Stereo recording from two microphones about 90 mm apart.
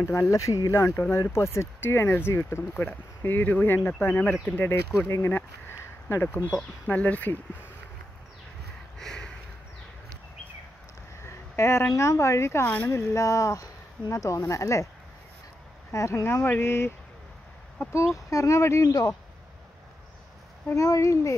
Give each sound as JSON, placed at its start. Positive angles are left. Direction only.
{"t": 0.0, "sound": "speech", "side_deg": 30}
{"t": 2.7, "sound": "speech", "side_deg": 15}
{"t": 6.9, "sound": "speech", "side_deg": 15}
{"t": 8.9, "sound": "a sound", "side_deg": 5}
{"t": 11.2, "sound": "a sound", "side_deg": 30}
{"t": 11.9, "sound": "speech", "side_deg": 35}
{"t": 15.9, "sound": "speech", "side_deg": 35}
{"t": 17.9, "sound": "speech", "side_deg": 35}
{"t": 20.7, "sound": "speech", "side_deg": 40}